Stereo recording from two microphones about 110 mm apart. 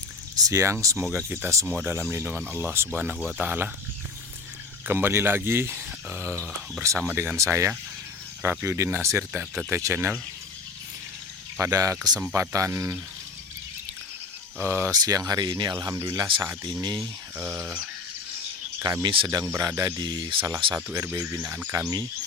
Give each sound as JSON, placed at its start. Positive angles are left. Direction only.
{"t": 0.3, "sound": "speech", "side_deg": -30}
{"t": 4.9, "sound": "speech", "side_deg": -20}
{"t": 6.8, "sound": "speech", "side_deg": -30}
{"t": 9.4, "sound": "speech", "side_deg": -5}
{"t": 9.7, "sound": "speech", "side_deg": -20}
{"t": 11.6, "sound": "speech", "side_deg": -30}
{"t": 14.6, "sound": "speech", "side_deg": -25}
{"t": 16.0, "sound": "speech", "side_deg": -45}
{"t": 17.5, "sound": "speech", "side_deg": -20}
{"t": 19.0, "sound": "speech", "side_deg": -55}
{"t": 19.5, "sound": "speech", "side_deg": -30}
{"t": 20.9, "sound": "speech", "side_deg": -25}